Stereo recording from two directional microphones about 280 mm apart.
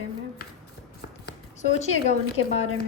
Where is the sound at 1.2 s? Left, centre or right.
Left.